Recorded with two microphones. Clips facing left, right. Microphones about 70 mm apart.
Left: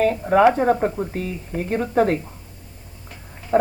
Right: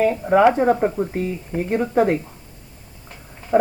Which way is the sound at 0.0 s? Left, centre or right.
Centre.